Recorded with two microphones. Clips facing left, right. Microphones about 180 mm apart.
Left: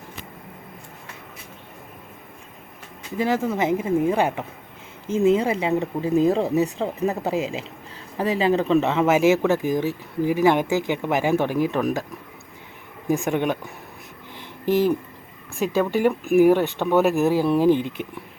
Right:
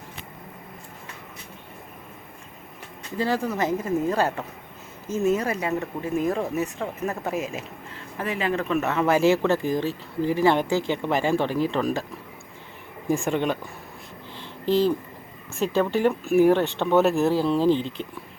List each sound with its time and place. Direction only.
3.2 s speech: 20° left (ahead or behind)
3.8 s speech: 10° left (ahead or behind)
5.3 s speech: 25° left (ahead or behind)
8.2 s speech: 35° left (ahead or behind)
8.8 s speech: 20° left (ahead or behind)
13.1 s speech: 5° left (ahead or behind)
13.3 s speech: 15° left (ahead or behind)
14.3 s a sound: 15° left (ahead or behind)
15.5 s speech: 15° left (ahead or behind)